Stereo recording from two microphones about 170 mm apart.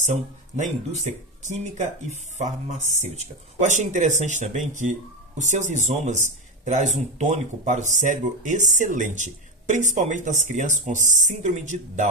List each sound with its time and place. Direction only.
0.0 s speech: 45° right (ahead or behind)